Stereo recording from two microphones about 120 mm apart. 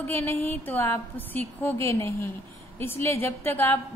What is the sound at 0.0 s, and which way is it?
A woman's voice, 15° left (ahead or behind).